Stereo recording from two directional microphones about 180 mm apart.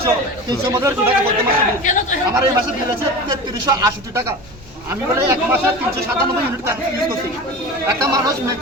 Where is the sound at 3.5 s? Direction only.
20° right (ahead or behind).